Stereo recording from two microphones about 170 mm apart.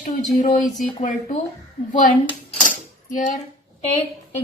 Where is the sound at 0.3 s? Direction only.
50° left (ahead or behind).